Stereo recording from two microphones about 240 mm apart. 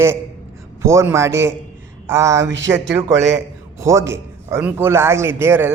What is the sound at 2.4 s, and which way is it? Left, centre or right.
Speech, right.